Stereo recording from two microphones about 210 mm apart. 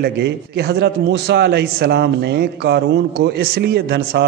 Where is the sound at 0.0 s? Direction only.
50° right (ahead or behind).